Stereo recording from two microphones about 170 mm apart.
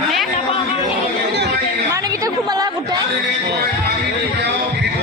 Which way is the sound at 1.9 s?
20° right (ahead or behind).